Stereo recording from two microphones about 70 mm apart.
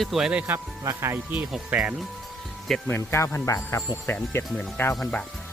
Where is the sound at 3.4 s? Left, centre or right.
Left.